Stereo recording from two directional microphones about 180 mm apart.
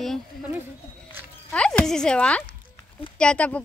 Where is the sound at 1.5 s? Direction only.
5° left (ahead or behind).